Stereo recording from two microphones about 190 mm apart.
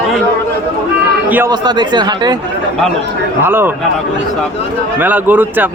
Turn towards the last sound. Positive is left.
turn(degrees=-10)  # may be behind; listen again after turning